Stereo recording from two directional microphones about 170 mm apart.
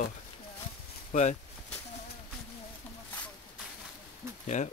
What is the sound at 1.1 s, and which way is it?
Speech, 45° left (ahead or behind).